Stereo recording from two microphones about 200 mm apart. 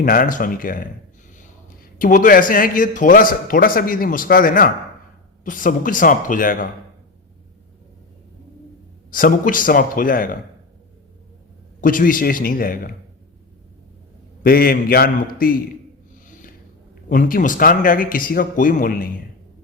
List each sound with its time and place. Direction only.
0.0 s a man's voice: 45° left (ahead or behind)
9.0 s speech: 45° left (ahead or behind)
11.8 s speech: 45° left (ahead or behind)
14.4 s speech: 45° left (ahead or behind)
17.1 s speech: 45° left (ahead or behind)